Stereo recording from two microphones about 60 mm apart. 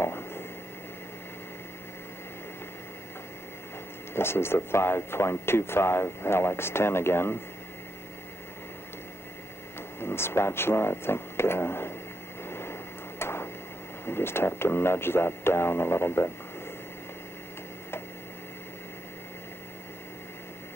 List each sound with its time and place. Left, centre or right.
0.0 s a sound: left
4.1 s speech: left
9.9 s speech: left
12.4 s vehicle: left
13.2 s a sound: left
14.0 s speech: left